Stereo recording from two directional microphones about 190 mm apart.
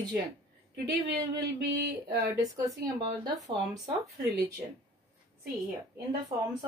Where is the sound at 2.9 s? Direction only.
20° right (ahead or behind).